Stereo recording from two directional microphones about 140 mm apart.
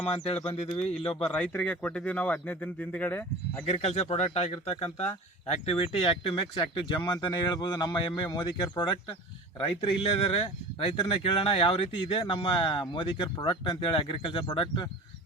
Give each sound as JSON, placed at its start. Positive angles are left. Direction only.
{"t": 0.0, "sound": "speech", "side_deg": 45}
{"t": 1.2, "sound": "speech", "side_deg": 10}
{"t": 3.7, "sound": "speech", "side_deg": 50}